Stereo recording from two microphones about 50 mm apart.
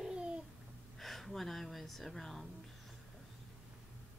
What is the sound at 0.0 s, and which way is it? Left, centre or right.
Babbling, centre.